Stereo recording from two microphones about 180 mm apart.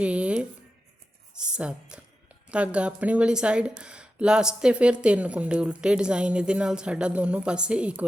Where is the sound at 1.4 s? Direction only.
5° right (ahead or behind).